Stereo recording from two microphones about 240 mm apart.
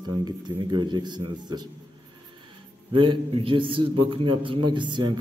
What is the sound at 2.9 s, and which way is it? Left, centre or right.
A man's voice, right.